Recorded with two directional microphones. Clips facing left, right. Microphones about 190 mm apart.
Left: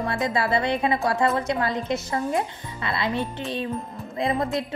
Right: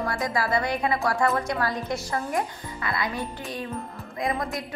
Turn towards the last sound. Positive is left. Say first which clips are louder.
# left 4 dB
turn(degrees=25)  # may be behind; listen again after turning